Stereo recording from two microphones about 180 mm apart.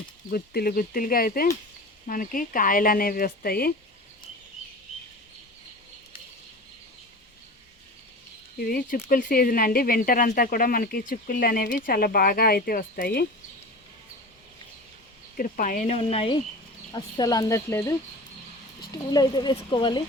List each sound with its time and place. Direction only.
0.3 s speech: 55° left (ahead or behind)
8.5 s speech: 55° left (ahead or behind)
15.4 s speech: 50° left (ahead or behind); by 16.4 s 35° left (ahead or behind)
16.9 s speech: 20° left (ahead or behind)